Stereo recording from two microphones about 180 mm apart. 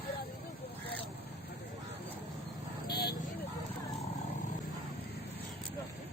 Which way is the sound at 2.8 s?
60° left (ahead or behind).